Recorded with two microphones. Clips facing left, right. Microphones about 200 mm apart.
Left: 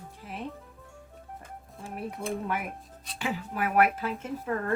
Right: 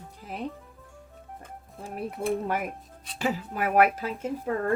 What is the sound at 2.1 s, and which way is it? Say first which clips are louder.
Speech: right 6 dB; 5° right (ahead or behind).